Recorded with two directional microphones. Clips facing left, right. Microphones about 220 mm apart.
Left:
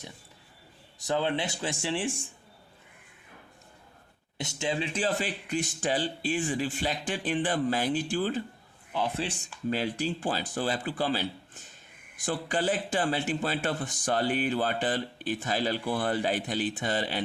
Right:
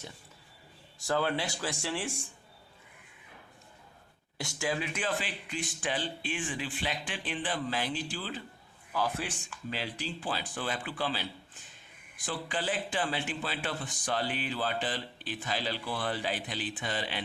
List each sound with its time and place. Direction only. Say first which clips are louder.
0.9 s speech: left 2 dB; 20° left (ahead or behind)
4.4 s a man's voice: left 2 dB; 20° left (ahead or behind); by 8.4 s 50° left (ahead or behind)
8.9 s a man's voice: left 2 dB; 25° left (ahead or behind)
9.6 s a man's voice: left 8 dB; 45° left (ahead or behind)